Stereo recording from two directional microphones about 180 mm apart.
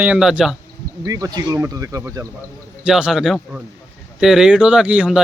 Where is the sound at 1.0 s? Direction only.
20° right (ahead or behind).